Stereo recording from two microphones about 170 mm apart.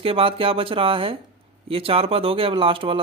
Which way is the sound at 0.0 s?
35° right (ahead or behind).